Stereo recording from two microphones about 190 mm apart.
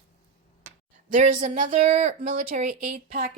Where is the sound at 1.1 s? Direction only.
40° right (ahead or behind).